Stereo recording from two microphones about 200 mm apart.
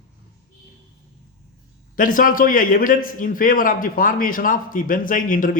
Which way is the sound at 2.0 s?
45° left (ahead or behind).